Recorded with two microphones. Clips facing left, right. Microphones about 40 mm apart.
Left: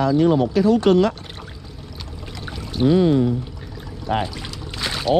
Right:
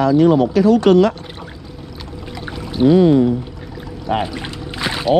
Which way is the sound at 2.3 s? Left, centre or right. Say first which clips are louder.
Right 5 dB; centre.